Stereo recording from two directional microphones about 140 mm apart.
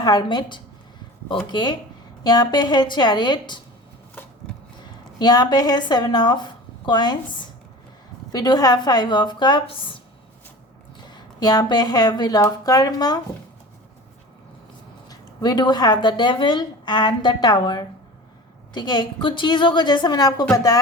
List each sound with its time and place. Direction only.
0.0 s speech: 30° left (ahead or behind)
4.8 s a woman's voice: 30° left (ahead or behind)
11.0 s a woman's voice: 30° left (ahead or behind)
15.1 s speech: 30° left (ahead or behind)